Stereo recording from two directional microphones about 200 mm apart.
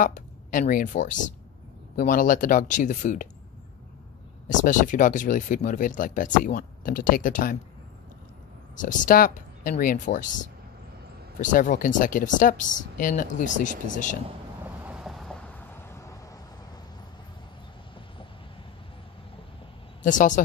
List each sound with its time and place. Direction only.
0.0 s speech: 40° left (ahead or behind)
4.5 s speech: 40° left (ahead or behind)
8.7 s speech: 40° left (ahead or behind)
14.9 s a sound: centre (ahead or behind)
20.0 s speech: 40° left (ahead or behind)